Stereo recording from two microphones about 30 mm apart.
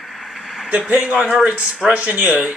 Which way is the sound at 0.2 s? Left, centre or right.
Centre.